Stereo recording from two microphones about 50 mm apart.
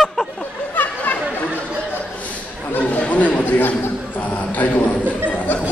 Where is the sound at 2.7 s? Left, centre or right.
Left.